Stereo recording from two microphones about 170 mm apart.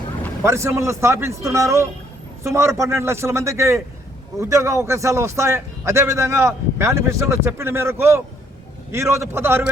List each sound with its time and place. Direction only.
0.4 s a man's voice: 15° right (ahead or behind)